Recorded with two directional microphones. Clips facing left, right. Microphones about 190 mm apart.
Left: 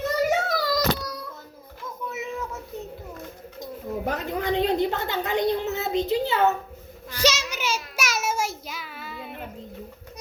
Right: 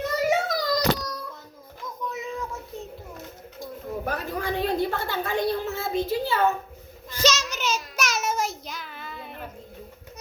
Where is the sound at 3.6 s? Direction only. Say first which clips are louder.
Left 2 dB; 20° left (ahead or behind).